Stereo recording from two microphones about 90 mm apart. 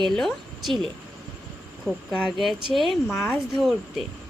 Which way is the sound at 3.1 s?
30° left (ahead or behind).